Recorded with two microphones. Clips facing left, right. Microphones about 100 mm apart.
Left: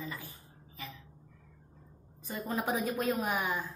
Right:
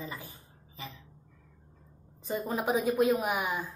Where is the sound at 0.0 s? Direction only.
20° right (ahead or behind).